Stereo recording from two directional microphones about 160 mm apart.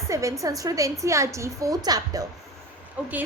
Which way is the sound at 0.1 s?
20° right (ahead or behind).